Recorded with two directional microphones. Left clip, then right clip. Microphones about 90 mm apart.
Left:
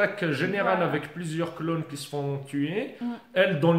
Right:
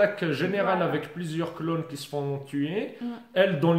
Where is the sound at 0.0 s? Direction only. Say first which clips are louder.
Right 1 dB; 30° right (ahead or behind).